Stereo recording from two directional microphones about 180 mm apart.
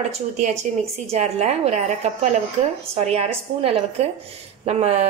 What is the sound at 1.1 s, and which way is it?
A woman's voice, 35° right (ahead or behind).